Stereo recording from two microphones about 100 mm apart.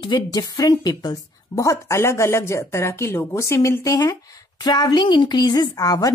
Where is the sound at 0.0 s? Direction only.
45° left (ahead or behind).